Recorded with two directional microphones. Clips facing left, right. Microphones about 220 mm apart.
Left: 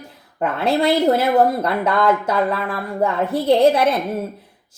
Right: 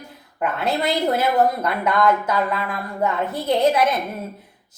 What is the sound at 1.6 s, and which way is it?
A woman's voice, 30° left (ahead or behind).